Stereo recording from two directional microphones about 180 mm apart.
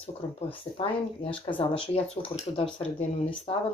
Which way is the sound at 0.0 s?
30° left (ahead or behind).